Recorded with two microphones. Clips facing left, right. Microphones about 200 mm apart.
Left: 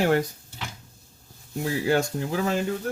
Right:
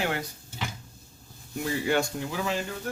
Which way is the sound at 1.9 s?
45° left (ahead or behind).